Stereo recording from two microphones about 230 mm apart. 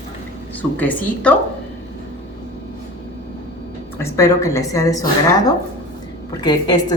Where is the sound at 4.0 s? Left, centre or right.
Centre.